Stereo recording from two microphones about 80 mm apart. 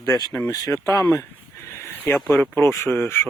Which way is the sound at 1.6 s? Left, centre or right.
Left.